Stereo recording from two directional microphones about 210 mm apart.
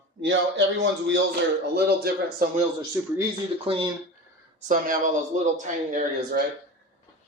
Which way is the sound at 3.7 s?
25° right (ahead or behind).